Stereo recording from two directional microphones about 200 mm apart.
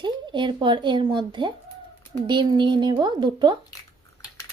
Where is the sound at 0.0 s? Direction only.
25° right (ahead or behind).